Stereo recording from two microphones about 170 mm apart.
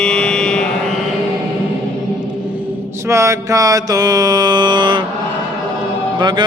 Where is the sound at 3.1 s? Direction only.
15° right (ahead or behind).